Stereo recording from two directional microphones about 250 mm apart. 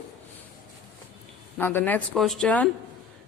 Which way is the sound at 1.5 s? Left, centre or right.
Centre.